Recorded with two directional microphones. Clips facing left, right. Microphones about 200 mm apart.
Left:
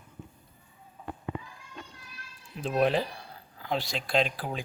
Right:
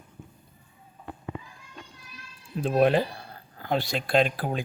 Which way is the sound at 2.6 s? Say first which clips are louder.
Right 4 dB; 45° right (ahead or behind).